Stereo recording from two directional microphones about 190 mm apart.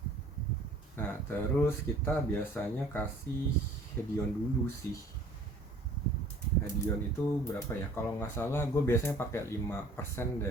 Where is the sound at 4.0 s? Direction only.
10° left (ahead or behind).